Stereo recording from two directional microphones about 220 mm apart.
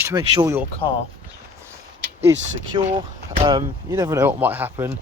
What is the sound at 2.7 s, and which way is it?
Speech, 25° right (ahead or behind).